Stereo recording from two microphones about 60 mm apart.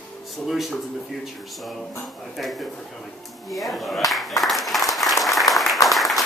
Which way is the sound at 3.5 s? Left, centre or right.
Centre.